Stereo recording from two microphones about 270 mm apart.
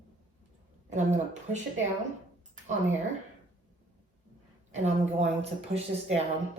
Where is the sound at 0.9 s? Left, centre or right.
Right.